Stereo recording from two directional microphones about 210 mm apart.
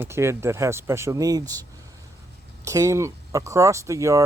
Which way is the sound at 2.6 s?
15° right (ahead or behind).